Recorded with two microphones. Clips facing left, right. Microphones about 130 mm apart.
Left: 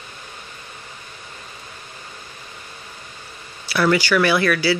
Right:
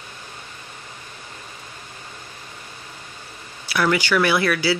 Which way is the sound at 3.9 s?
20° right (ahead or behind).